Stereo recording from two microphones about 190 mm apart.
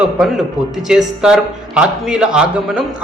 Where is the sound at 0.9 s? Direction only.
5° right (ahead or behind).